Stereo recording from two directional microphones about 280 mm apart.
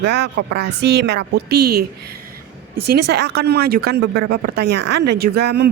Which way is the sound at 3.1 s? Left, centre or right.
Right.